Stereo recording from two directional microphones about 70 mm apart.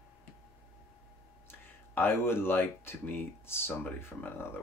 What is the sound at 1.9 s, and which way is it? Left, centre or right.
Speech, left.